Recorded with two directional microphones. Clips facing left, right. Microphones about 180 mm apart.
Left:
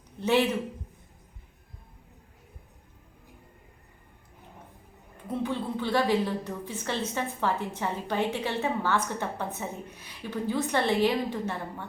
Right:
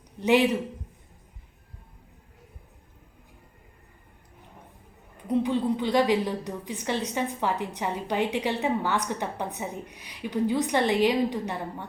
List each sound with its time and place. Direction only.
0.2 s a woman's voice: 15° right (ahead or behind)
5.3 s a woman's voice: 15° right (ahead or behind)